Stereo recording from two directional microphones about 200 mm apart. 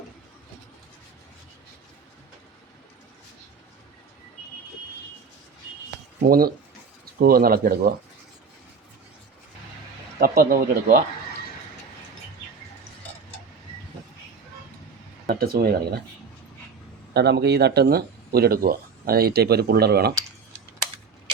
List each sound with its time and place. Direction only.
6.2 s speech: 45° right (ahead or behind)
10.2 s speech: 50° right (ahead or behind)
15.3 s speech: 50° right (ahead or behind)
17.2 s speech: 55° right (ahead or behind)